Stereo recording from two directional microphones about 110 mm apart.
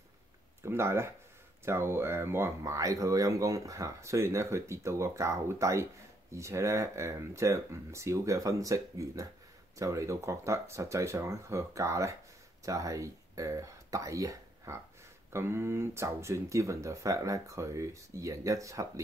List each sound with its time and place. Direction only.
0.6 s speech: 20° right (ahead or behind)